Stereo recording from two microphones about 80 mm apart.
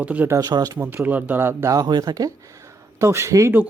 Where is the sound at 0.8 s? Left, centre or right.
Right.